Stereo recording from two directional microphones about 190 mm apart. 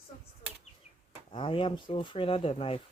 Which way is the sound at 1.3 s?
25° left (ahead or behind).